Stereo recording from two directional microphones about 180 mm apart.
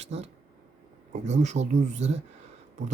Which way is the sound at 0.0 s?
35° right (ahead or behind).